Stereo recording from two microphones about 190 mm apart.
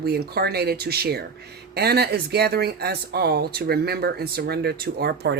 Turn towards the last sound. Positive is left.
turn(degrees=-55)  # may be behind; listen again after turning